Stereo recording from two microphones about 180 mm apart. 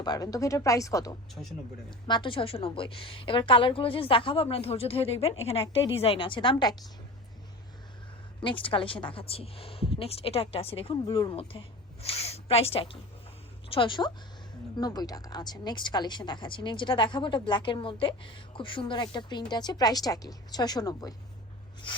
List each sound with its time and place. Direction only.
0.0 s a woman's voice: 20° left (ahead or behind)
1.4 s speech: centre (ahead or behind)
2.0 s a woman's voice: 25° left (ahead or behind)
8.4 s a woman's voice: 30° left (ahead or behind)